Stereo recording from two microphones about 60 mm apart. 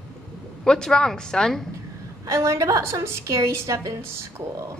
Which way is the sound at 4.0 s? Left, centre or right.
Right.